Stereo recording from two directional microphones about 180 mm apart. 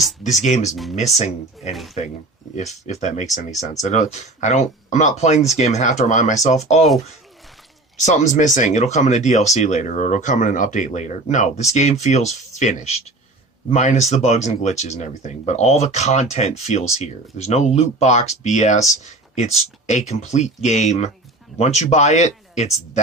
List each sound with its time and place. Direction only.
0.4 s speech: 40° left (ahead or behind)
8.0 s speech: 45° left (ahead or behind)